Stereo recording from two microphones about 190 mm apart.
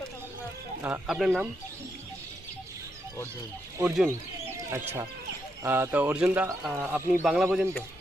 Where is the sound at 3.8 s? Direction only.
10° right (ahead or behind).